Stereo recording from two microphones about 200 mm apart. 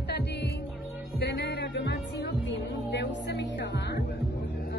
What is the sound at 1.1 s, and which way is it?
Music, 55° left (ahead or behind).